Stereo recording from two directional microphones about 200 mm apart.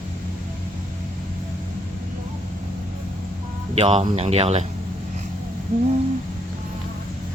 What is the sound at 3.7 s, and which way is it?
Speech, 30° right (ahead or behind).